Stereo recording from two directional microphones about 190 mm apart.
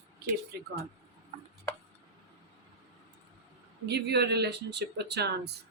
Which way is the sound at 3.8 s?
60° right (ahead or behind).